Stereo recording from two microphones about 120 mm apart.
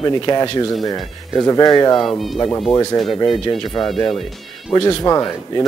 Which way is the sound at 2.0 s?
Centre (ahead or behind).